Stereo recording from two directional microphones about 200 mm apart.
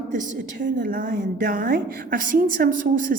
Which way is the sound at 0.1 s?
40° right (ahead or behind).